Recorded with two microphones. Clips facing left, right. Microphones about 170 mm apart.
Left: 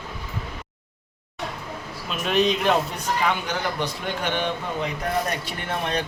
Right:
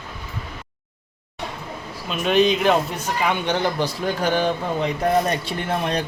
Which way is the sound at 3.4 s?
30° right (ahead or behind).